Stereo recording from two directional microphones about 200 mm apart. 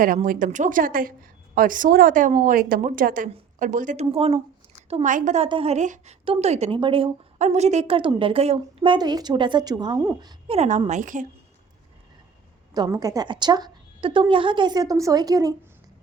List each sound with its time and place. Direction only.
0.0 s a woman's voice: 45° right (ahead or behind); by 10.6 s 20° right (ahead or behind)
10.6 s speech: 35° right (ahead or behind)
12.7 s speech: 20° right (ahead or behind)